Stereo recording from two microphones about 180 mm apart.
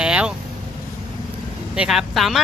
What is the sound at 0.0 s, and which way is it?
Vehicle, 5° right (ahead or behind).